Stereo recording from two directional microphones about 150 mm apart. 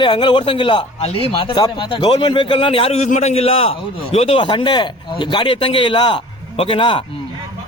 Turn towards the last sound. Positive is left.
turn(degrees=35)  # may be behind; listen again after turning